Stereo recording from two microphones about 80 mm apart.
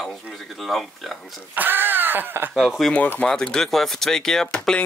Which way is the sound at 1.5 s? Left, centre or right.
Right.